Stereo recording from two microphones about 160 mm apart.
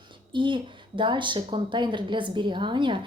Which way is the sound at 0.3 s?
30° right (ahead or behind).